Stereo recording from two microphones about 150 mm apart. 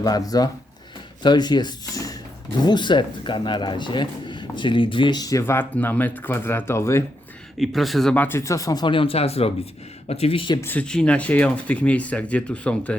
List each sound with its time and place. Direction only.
0.0 s speech: 25° left (ahead or behind)
7.6 s speech: centre (ahead or behind); by 10.6 s 35° left (ahead or behind)
10.6 s speech: 10° left (ahead or behind)